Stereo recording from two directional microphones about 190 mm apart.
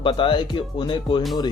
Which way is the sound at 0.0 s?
25° left (ahead or behind).